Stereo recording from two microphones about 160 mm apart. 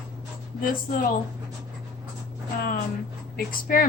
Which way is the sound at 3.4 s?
60° left (ahead or behind).